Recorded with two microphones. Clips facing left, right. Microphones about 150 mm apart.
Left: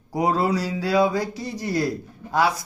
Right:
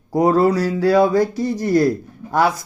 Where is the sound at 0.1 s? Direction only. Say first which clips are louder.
Right 7 dB; 50° right (ahead or behind).